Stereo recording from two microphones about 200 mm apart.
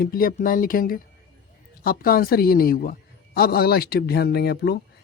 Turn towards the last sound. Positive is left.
turn(degrees=55)  # may be behind; listen again after turning